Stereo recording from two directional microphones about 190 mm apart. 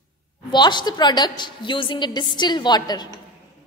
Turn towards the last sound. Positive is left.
turn(degrees=20)  # may be behind; listen again after turning